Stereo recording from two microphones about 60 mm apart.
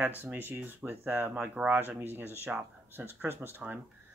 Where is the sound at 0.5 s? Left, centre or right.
Right.